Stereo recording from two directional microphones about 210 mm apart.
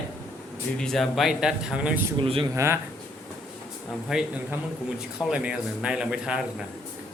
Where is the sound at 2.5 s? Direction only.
15° right (ahead or behind).